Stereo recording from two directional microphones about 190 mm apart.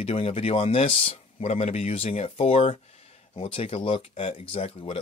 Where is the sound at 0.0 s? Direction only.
30° left (ahead or behind).